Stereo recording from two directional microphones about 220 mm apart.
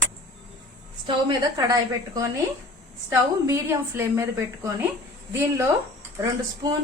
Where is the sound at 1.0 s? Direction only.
15° right (ahead or behind).